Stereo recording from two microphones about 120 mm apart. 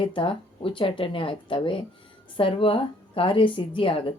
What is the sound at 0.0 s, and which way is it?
A woman's voice, 45° left (ahead or behind).